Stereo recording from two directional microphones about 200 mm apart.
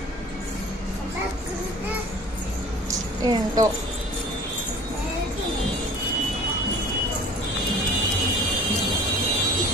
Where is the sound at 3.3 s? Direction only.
20° right (ahead or behind).